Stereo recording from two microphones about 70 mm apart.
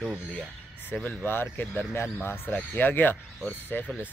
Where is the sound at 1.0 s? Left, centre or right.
Left.